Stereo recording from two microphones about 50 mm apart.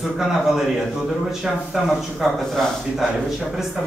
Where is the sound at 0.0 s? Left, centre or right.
Centre.